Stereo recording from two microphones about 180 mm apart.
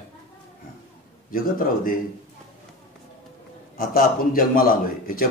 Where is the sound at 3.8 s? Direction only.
55° left (ahead or behind).